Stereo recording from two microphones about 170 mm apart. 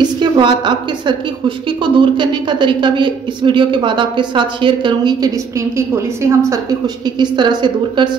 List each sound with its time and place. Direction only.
0.0 s a woman's voice: 25° right (ahead or behind)
5.8 s a woman's voice: 15° right (ahead or behind)